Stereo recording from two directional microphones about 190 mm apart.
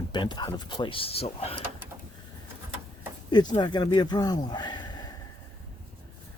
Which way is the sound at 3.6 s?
25° left (ahead or behind).